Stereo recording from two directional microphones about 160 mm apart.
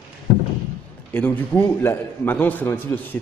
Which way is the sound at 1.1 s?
10° left (ahead or behind).